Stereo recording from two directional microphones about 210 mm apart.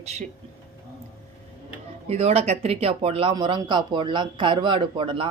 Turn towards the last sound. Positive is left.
turn(degrees=-25)  # may be behind; listen again after turning